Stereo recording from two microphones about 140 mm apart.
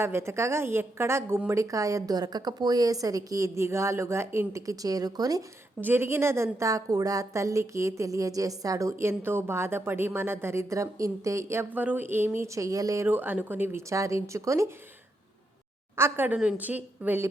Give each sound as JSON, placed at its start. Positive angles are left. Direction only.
{"t": 0.0, "sound": "a woman's voice", "side_deg": -20}
{"t": 5.8, "sound": "a woman's voice", "side_deg": -15}
{"t": 16.0, "sound": "a woman's voice", "side_deg": -15}